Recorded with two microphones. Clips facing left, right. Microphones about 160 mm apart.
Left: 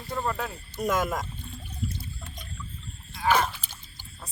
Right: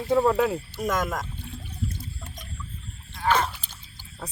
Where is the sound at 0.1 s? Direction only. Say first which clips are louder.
Right 10 dB; 75° right (ahead or behind).